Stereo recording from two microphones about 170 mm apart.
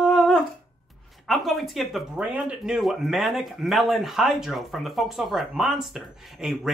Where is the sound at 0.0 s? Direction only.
Centre (ahead or behind).